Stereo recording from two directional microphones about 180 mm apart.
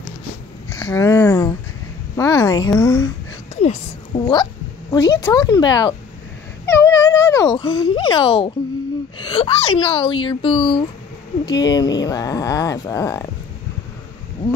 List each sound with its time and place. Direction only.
0.7 s a woman's voice: 15° left (ahead or behind)
4.2 s speech: 25° left (ahead or behind)
6.6 s a sound: 15° left (ahead or behind)
9.2 s speech: 30° left (ahead or behind)